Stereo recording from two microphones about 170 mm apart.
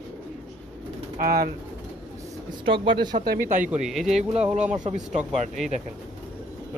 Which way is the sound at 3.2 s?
65° right (ahead or behind).